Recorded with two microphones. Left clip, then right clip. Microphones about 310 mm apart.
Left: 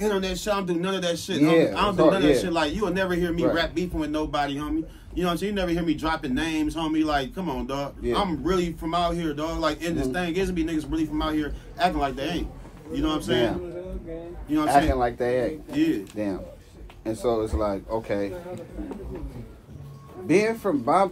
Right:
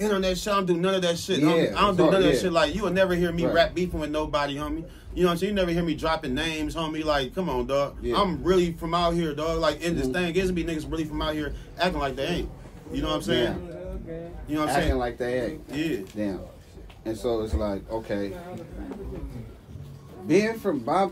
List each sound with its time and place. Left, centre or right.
0.0 s a man's voice: centre
14.7 s speech: left
15.7 s a man's voice: centre
17.0 s speech: centre
20.2 s speech: centre